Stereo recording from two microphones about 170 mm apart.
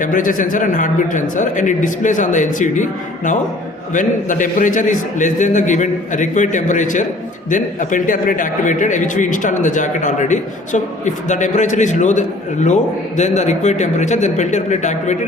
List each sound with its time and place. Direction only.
0.0 s a man's voice: 50° left (ahead or behind)